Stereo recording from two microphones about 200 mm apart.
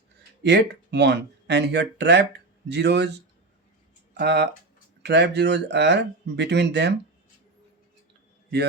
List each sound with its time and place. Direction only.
0.4 s speech: 60° right (ahead or behind)
4.2 s speech: 60° right (ahead or behind)